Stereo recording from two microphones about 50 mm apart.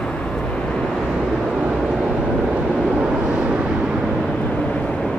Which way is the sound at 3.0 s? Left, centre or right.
Centre.